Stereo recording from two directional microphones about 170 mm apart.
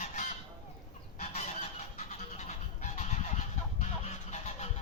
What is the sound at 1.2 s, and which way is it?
Goose, 40° left (ahead or behind).